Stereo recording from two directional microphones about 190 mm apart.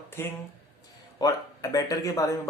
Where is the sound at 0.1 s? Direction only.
10° left (ahead or behind).